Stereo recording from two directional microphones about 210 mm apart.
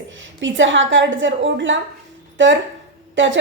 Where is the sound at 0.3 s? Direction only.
60° right (ahead or behind).